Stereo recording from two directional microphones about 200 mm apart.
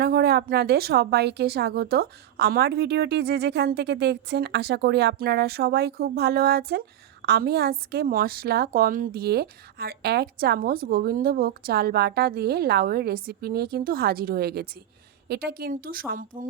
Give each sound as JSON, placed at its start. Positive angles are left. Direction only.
{"t": 0.0, "sound": "speech", "side_deg": -50}